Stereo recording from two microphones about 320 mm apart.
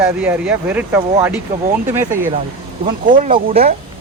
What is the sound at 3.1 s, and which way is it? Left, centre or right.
Speech, right.